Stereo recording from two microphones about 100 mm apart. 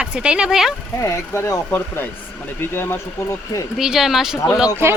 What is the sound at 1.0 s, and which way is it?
Speech, 30° left (ahead or behind).